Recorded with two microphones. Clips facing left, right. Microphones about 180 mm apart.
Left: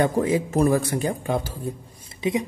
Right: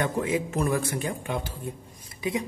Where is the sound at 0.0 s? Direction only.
35° left (ahead or behind).